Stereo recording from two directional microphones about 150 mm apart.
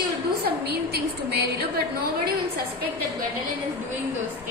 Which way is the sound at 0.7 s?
90° right.